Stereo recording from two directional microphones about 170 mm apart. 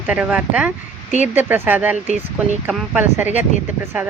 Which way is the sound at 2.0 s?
40° right (ahead or behind).